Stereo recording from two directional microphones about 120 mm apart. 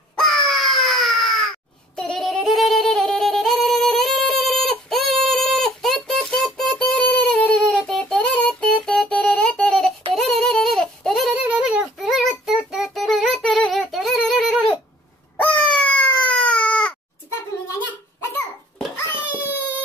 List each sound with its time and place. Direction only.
0.1 s baby cry: centre (ahead or behind)
2.0 s yodeling: 5° left (ahead or behind)
10.1 s a sound: 5° left (ahead or behind)
11.3 s child singing: 10° right (ahead or behind)
15.3 s baby cry: 10° left (ahead or behind)
19.1 s a sound: 20° left (ahead or behind)